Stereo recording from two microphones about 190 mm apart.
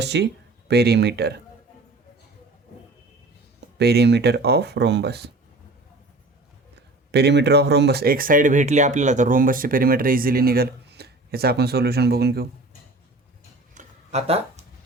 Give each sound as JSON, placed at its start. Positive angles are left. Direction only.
{"t": 0.0, "sound": "speech", "side_deg": -65}
{"t": 3.8, "sound": "speech", "side_deg": -60}
{"t": 7.1, "sound": "speech", "side_deg": -60}
{"t": 13.7, "sound": "a sound", "side_deg": -35}